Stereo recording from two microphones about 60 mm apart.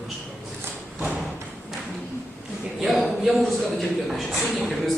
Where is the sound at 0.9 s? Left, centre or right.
Right.